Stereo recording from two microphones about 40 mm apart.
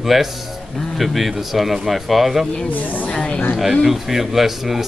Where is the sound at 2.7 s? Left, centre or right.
Left.